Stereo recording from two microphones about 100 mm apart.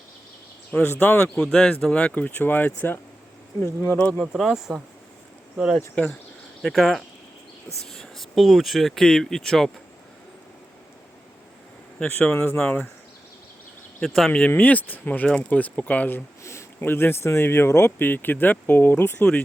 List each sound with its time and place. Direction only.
0.7 s speech: 15° left (ahead or behind)
1.4 s speech: 5° left (ahead or behind); by 3.9 s 25° left (ahead or behind)
4.2 s speech: 5° right (ahead or behind)
5.9 s speech: 10° left (ahead or behind)
11.9 s speech: 15° left (ahead or behind)
14.0 s speech: 5° left (ahead or behind); by 19.3 s 20° left (ahead or behind)